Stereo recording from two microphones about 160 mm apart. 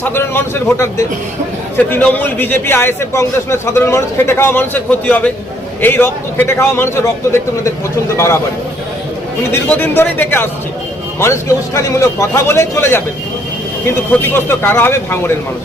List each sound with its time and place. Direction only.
0.0 s a man's voice: 15° left (ahead or behind)
9.5 s a man's voice: 10° left (ahead or behind)